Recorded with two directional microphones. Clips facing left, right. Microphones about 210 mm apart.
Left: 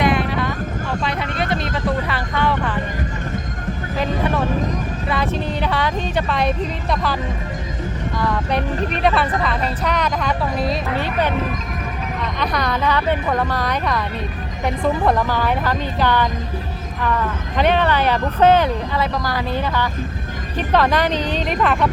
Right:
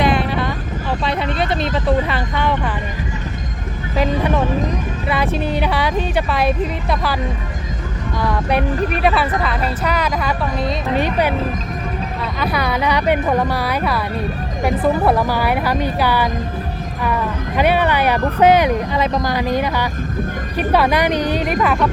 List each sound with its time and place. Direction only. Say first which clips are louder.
0.0 s vehicle: right 1 dB; 30° right (ahead or behind)
5.0 s speech: right 3 dB; 10° right (ahead or behind)
9.0 s speech: left 1 dB; 5° right (ahead or behind)
10.8 s speech: right 3 dB; 15° right (ahead or behind)
12.4 s speech: right 2 dB; 5° right (ahead or behind)